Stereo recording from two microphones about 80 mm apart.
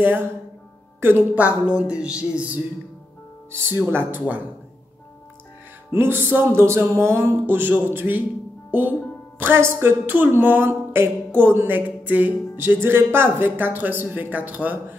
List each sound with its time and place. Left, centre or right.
1.0 s speech: right
3.6 s speech: right
5.9 s speech: right
9.4 s speech: right